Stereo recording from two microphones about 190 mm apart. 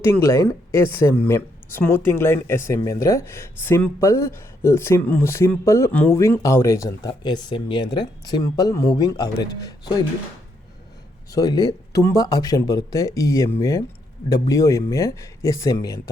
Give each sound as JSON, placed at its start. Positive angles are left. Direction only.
{"t": 0.0, "sound": "speech", "side_deg": 15}
{"t": 11.3, "sound": "speech", "side_deg": 20}